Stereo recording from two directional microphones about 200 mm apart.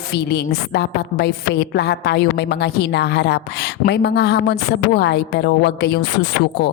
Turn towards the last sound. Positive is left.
turn(degrees=55)  # may be behind; listen again after turning